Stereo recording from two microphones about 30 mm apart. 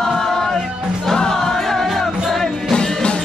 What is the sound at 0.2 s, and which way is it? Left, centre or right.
Music, centre.